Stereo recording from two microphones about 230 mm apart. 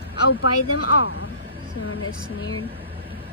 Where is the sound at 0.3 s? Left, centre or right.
Left.